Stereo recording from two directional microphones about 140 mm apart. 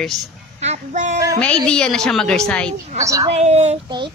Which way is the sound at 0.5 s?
50° right (ahead or behind).